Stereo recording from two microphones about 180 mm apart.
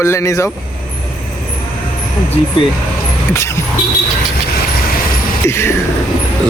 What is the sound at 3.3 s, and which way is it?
Music, 15° left (ahead or behind).